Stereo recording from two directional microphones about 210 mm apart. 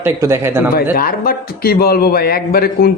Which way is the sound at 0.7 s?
45° left (ahead or behind).